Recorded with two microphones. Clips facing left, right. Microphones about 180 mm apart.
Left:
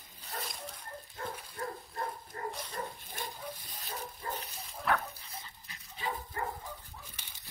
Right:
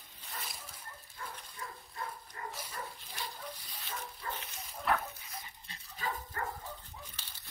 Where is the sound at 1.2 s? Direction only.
55° left (ahead or behind).